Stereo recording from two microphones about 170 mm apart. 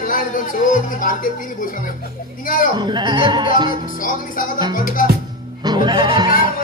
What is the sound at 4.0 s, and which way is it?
Music, 55° left (ahead or behind).